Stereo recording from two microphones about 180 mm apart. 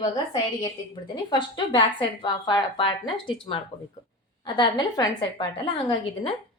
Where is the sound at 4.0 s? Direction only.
20° left (ahead or behind).